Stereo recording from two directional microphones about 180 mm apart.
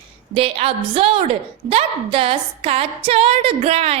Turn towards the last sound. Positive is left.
turn(degrees=-35)  # may be behind; listen again after turning